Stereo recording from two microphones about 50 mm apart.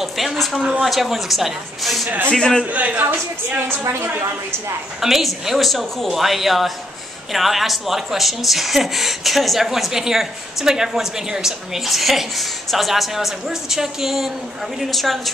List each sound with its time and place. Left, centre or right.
0.0 s speech: centre
0.6 s speech: centre
0.8 s speech: centre
2.0 s a woman's voice: right
2.3 s a man's voice: centre
2.7 s a woman's voice: right
4.2 s a woman's voice: right
5.0 s speech: centre